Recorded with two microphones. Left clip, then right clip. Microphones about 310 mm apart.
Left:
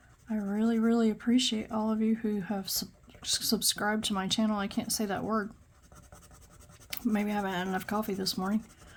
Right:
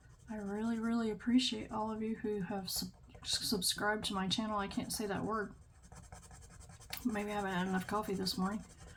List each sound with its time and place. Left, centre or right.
0.3 s speech: left
6.9 s speech: left